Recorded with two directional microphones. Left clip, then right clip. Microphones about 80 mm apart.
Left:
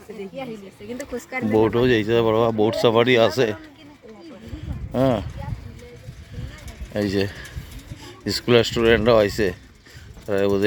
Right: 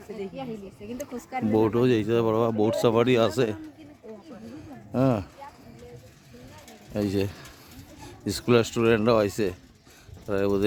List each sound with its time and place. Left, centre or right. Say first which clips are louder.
1.3 s speech: left 4 dB; centre
4.9 s speech: left 4 dB; centre
6.9 s speech: left 4 dB; centre